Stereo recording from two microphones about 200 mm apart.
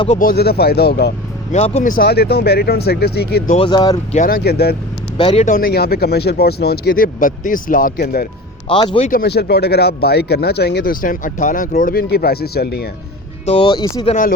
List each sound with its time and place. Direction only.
0.2 s speech: 50° left (ahead or behind)
1.5 s speech: 35° left (ahead or behind); by 3.4 s 55° left (ahead or behind)
3.5 s speech: 25° left (ahead or behind)
4.1 s speech: 45° left (ahead or behind)
5.1 s speech: 30° left (ahead or behind); by 8.3 s 50° left (ahead or behind)
8.7 s speech: 25° left (ahead or behind)
9.0 s speech: 50° left (ahead or behind)
13.4 s speech: 30° left (ahead or behind)
14.1 s speech: 40° left (ahead or behind)